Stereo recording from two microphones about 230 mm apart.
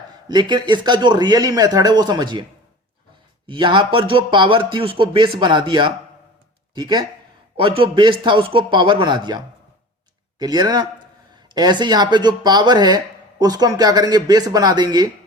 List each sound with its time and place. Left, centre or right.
0.3 s speech: centre
3.4 s speech: right